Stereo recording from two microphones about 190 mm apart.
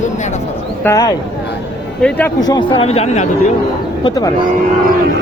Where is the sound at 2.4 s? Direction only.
20° left (ahead or behind).